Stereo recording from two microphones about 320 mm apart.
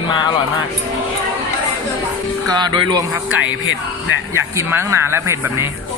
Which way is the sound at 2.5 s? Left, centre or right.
Centre.